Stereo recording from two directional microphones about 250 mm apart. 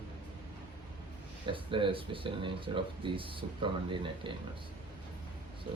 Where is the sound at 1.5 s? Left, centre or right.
Centre.